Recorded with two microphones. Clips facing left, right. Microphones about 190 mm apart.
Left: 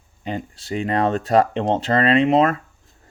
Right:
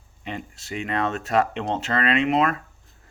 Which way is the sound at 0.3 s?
35° left (ahead or behind).